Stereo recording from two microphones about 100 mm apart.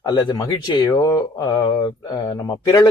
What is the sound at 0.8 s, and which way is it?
Speech, 35° left (ahead or behind).